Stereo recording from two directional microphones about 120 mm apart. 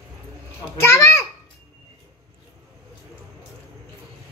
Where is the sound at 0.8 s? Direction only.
20° left (ahead or behind).